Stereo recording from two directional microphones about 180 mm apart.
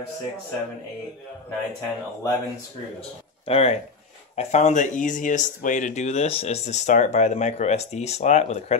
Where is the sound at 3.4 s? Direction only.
35° left (ahead or behind).